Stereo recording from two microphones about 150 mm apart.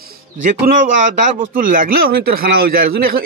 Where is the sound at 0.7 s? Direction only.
90° right.